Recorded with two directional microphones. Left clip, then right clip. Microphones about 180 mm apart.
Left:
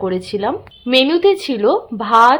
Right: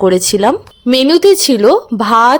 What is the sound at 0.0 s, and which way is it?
Speech, 40° right (ahead or behind).